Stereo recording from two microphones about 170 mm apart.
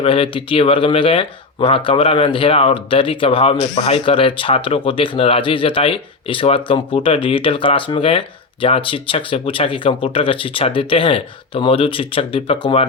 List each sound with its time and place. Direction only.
0.0 s speech: 30° left (ahead or behind)